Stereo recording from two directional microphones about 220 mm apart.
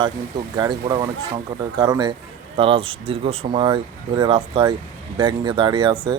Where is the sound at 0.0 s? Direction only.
20° right (ahead or behind).